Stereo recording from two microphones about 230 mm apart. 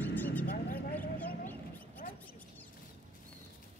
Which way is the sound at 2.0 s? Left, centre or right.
Left.